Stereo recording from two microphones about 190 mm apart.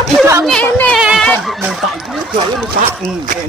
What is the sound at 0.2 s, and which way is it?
Chatter, 10° right (ahead or behind).